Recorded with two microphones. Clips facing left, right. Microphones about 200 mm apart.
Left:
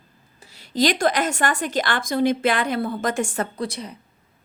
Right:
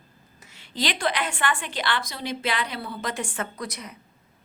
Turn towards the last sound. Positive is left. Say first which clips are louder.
# left 6 dB
turn(degrees=30)  # may be behind; listen again after turning